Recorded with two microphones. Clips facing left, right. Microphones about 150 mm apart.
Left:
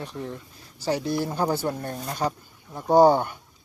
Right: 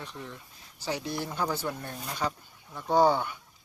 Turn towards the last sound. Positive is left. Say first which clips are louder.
# left 6 dB
turn(degrees=45)  # may be behind; listen again after turning